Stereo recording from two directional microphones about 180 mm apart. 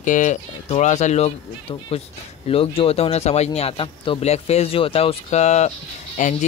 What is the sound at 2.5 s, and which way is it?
Speech, 30° left (ahead or behind).